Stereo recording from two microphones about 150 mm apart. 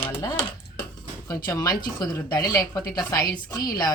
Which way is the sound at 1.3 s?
20° left (ahead or behind).